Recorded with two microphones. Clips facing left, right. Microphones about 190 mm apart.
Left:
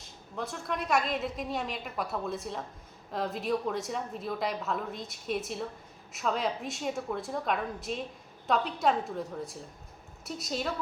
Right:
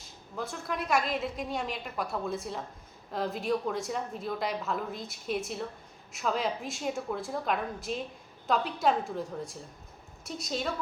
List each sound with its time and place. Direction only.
0.0 s a woman's voice: centre (ahead or behind)